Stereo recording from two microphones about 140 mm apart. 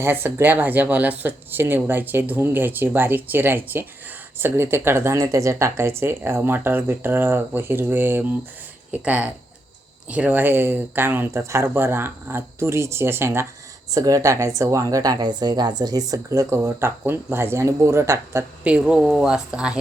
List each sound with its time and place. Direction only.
0.0 s speech: 15° right (ahead or behind)